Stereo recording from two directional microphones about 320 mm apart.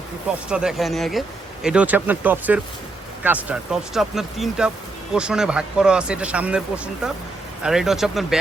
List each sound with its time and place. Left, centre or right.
0.5 s speech: centre